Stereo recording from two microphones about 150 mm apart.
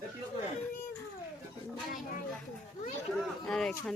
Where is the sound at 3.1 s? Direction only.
5° left (ahead or behind).